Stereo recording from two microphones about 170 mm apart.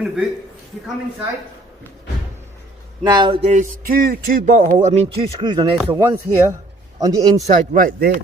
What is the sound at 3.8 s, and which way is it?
Speech, 60° right (ahead or behind).